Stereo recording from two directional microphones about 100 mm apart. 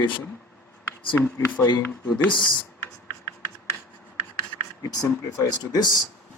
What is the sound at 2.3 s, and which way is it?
Speech, 55° left (ahead or behind).